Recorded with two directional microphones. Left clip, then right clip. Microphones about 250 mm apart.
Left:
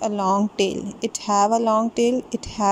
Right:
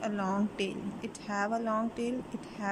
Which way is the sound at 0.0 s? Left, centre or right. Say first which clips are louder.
Left 12 dB; left.